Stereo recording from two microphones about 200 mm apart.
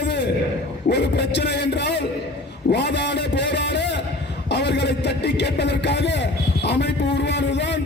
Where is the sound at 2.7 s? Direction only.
60° left (ahead or behind).